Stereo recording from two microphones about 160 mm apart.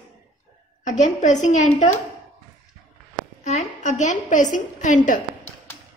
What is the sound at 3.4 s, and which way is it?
A woman's voice, 50° left (ahead or behind).